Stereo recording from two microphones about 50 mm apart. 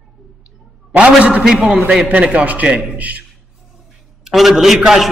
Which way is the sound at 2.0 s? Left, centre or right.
Right.